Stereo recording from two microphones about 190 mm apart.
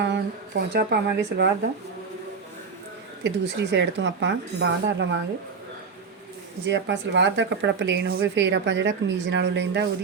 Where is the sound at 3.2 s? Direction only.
65° right (ahead or behind).